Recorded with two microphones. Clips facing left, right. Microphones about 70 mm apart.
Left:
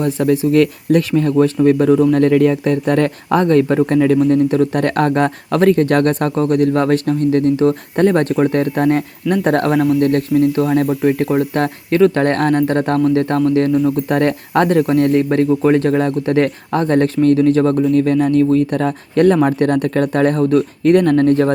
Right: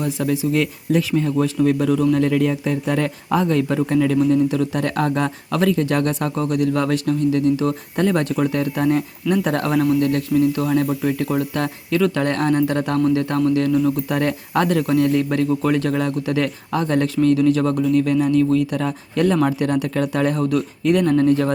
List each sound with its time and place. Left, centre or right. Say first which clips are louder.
0.0 s speech: left 6 dB; left
1.5 s speech: left 6 dB; left
2.1 s speech: left 6 dB; left
14.1 s speech: left 5 dB; left